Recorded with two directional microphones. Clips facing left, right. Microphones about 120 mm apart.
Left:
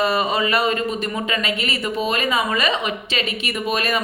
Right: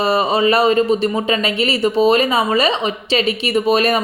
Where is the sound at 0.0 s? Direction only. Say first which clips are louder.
Right 5 dB; 35° right (ahead or behind).